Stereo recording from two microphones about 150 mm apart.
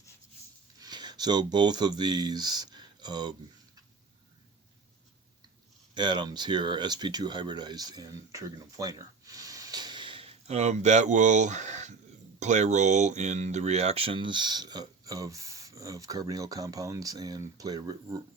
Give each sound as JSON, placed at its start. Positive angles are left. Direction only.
{"t": 0.8, "sound": "speech", "side_deg": -30}
{"t": 5.9, "sound": "speech", "side_deg": -30}